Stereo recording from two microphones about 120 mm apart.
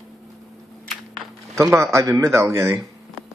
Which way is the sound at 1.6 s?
25° right (ahead or behind).